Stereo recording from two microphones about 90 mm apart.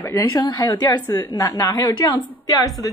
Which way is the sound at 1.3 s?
40° left (ahead or behind).